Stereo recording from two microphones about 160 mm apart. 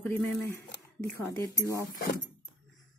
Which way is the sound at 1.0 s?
20° left (ahead or behind).